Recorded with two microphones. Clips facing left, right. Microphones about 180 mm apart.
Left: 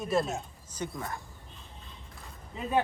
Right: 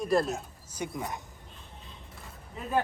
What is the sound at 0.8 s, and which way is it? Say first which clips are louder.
Speech: right 1 dB; 20° right (ahead or behind).